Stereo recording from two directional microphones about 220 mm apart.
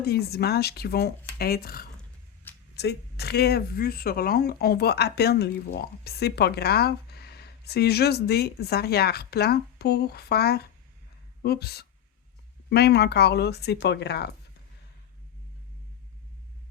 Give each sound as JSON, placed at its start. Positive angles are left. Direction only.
{"t": 0.0, "sound": "speech", "side_deg": 45}